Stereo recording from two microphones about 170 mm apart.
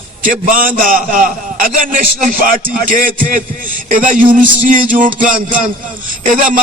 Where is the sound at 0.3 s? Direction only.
55° right (ahead or behind).